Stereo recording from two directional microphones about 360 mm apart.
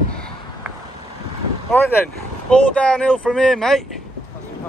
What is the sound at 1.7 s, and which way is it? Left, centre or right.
Speech, centre.